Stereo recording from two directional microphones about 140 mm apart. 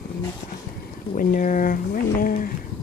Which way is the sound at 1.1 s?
75° left (ahead or behind).